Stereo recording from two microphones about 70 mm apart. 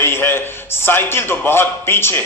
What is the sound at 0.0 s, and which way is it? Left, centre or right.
A man's voice, left.